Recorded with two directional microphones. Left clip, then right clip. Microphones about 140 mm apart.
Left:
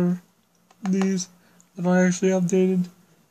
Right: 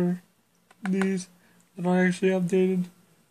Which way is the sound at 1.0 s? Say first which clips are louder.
Left 3 dB; 20° left (ahead or behind).